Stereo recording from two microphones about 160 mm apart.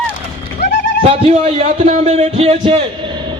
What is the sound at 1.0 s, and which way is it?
A man's voice, 40° right (ahead or behind).